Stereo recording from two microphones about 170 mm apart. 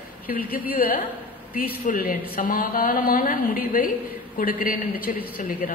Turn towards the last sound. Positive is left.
turn(degrees=55)  # may be behind; listen again after turning